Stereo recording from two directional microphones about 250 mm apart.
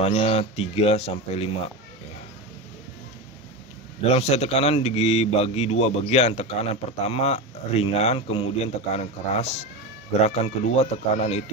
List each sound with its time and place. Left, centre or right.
0.0 s a man's voice: left
4.1 s a man's voice: left